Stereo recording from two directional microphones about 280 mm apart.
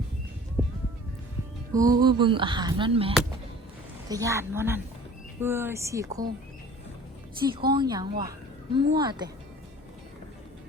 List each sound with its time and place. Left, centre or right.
1.7 s speech: centre
7.7 s speech: centre